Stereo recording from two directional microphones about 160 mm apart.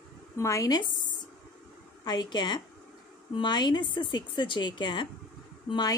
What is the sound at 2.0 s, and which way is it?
A woman's voice, 25° left (ahead or behind).